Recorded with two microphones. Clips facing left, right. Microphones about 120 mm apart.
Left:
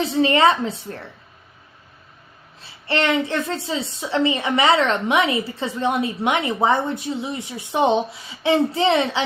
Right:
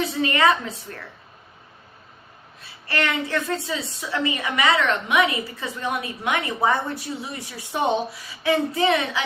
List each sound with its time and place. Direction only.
0.0 s a woman's voice: 30° left (ahead or behind)
2.6 s a woman's voice: 25° left (ahead or behind)